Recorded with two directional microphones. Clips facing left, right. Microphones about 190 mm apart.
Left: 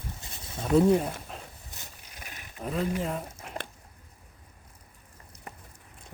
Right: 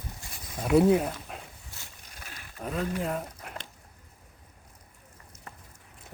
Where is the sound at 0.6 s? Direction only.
10° right (ahead or behind).